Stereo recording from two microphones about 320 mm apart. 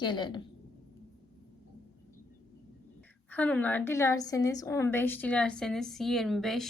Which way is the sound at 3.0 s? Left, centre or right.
Centre.